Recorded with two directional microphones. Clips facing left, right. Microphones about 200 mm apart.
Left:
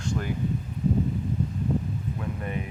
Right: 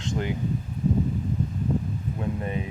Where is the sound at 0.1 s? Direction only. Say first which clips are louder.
Right 2 dB; 20° right (ahead or behind).